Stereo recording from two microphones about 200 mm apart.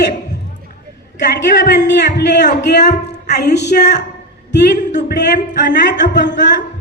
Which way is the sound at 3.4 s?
60° left (ahead or behind).